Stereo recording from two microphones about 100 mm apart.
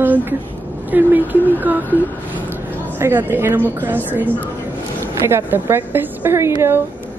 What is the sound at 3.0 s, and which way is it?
A woman's voice, 25° right (ahead or behind).